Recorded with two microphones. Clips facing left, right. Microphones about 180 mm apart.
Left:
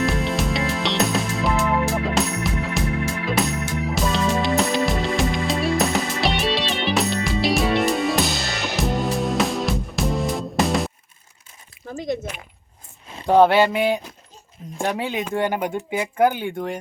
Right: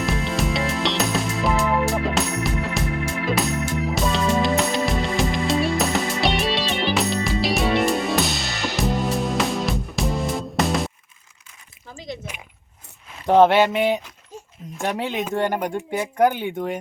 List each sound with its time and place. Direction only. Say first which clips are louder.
0.0 s music: left 2 dB; centre (ahead or behind)
11.9 s a sound: left 8 dB; 50° left (ahead or behind)
13.2 s speech: even; centre (ahead or behind)